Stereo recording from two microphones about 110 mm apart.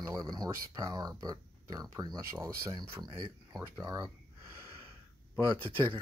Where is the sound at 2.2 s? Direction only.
25° right (ahead or behind).